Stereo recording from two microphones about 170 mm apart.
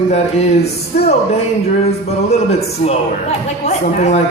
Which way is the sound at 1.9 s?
40° left (ahead or behind).